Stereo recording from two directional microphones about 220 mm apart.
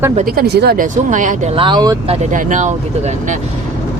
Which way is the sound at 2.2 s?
35° right (ahead or behind).